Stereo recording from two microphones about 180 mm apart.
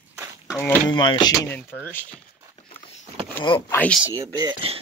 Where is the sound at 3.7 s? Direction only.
5° left (ahead or behind).